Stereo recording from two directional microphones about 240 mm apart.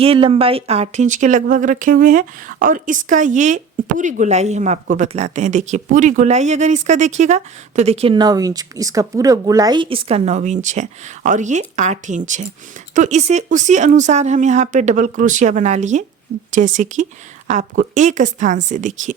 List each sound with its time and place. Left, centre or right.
0.0 s speech: right